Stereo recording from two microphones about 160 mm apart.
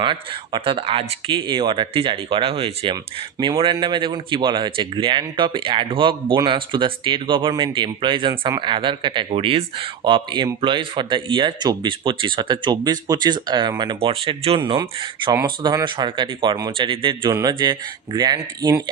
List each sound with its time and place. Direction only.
0.0 s speech: 30° right (ahead or behind)
3.3 s speech: 20° right (ahead or behind)